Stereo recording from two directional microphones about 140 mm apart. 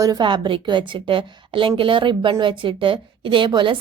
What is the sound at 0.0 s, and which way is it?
A woman's voice, 30° right (ahead or behind).